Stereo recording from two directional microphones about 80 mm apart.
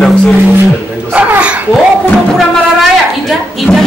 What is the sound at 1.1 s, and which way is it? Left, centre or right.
Speech, centre.